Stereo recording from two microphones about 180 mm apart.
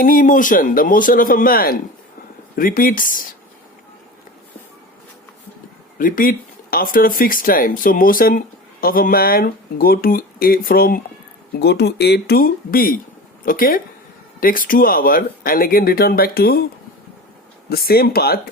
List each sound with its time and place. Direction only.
0.0 s speech: 50° left (ahead or behind)
6.0 s speech: 50° left (ahead or behind)
11.6 s speech: 65° left (ahead or behind)
17.7 s speech: 60° left (ahead or behind)